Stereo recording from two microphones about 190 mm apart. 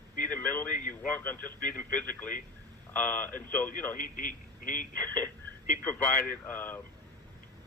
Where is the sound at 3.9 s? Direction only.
45° left (ahead or behind).